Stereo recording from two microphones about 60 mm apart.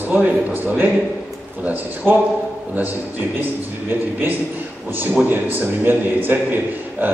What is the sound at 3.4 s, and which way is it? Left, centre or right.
A man's voice, right.